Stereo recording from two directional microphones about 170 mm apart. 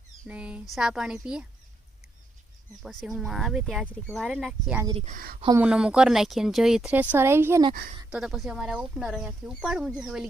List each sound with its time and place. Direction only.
0.3 s speech: 5° right (ahead or behind)
2.8 s speech: centre (ahead or behind)
5.0 s speech: 55° right (ahead or behind)
5.5 s speech: 5° right (ahead or behind)
8.1 s speech: 5° right (ahead or behind)